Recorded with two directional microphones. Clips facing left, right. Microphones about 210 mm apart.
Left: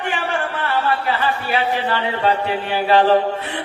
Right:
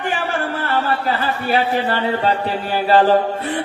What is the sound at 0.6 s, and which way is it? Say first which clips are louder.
Speech: even; 40° right (ahead or behind).